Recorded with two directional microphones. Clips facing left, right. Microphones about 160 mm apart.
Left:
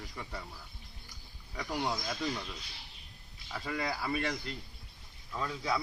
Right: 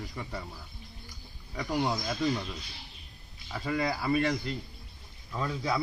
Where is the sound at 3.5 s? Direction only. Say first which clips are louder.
Right 5 dB; 10° right (ahead or behind).